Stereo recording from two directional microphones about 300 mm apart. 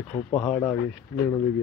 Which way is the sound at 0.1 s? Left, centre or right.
Centre.